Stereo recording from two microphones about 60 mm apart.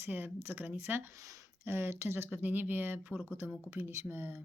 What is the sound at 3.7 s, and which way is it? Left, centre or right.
Speech, right.